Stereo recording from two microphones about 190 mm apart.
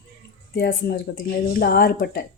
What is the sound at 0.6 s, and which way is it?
Speech, 55° left (ahead or behind).